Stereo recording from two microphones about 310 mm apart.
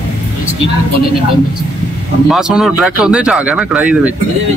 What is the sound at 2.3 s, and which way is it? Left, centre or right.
Speech, centre.